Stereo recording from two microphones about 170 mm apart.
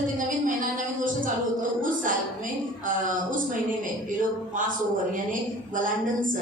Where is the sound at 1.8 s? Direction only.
50° right (ahead or behind).